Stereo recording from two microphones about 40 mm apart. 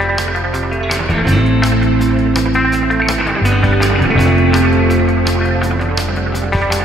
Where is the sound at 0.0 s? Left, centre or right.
Centre.